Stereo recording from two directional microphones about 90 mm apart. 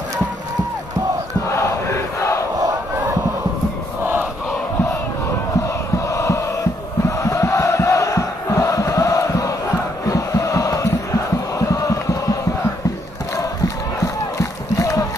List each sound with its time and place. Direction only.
1.5 s crowd: 35° left (ahead or behind)
5.9 s chant: 35° left (ahead or behind)
14.0 s music: 35° left (ahead or behind)